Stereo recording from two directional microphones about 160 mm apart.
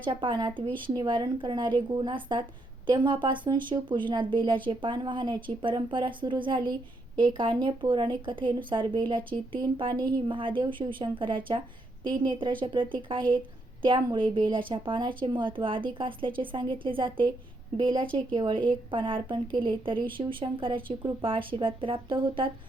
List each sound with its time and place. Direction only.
0.0 s speech: 30° right (ahead or behind)
18.0 s speech: 5° left (ahead or behind)
18.3 s speech: 30° right (ahead or behind)